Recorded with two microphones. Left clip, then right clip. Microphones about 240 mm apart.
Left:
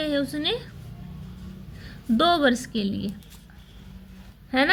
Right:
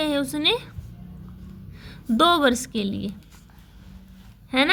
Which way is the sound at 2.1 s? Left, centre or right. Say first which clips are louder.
Right 2 dB; right.